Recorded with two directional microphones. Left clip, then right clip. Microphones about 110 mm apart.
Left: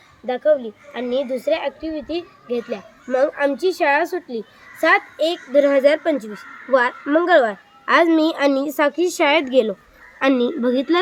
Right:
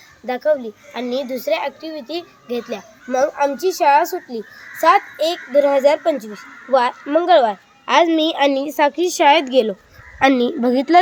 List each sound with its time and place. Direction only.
0.3 s a child's voice: 10° left (ahead or behind)
8.7 s a woman's voice: centre (ahead or behind)
9.2 s a woman's voice: 25° right (ahead or behind)
10.2 s a woman's voice: 45° right (ahead or behind)
10.6 s speech: 90° right